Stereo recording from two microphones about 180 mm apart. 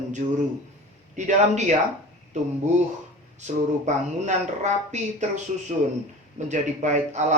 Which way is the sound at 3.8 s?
40° right (ahead or behind).